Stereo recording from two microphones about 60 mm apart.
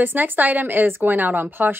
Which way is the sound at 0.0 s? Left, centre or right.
Right.